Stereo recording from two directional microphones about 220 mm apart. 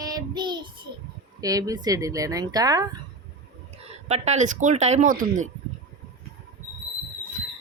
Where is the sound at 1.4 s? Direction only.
15° right (ahead or behind).